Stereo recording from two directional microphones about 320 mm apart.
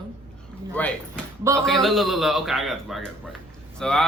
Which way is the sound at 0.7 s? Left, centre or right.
Centre.